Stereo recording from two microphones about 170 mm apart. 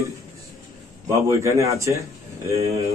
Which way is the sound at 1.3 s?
15° right (ahead or behind).